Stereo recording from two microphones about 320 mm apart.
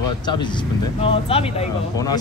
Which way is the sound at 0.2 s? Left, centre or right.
Centre.